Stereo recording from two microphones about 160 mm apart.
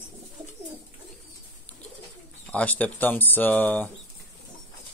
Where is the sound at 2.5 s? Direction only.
10° left (ahead or behind).